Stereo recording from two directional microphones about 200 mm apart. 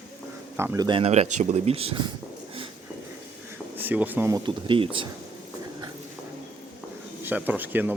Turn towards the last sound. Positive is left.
turn(degrees=-10)  # may be behind; listen again after turning